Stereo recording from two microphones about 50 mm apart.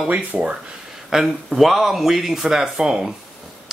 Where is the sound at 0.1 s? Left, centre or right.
Right.